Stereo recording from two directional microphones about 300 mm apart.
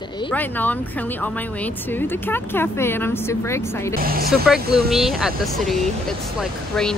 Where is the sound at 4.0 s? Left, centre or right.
Right.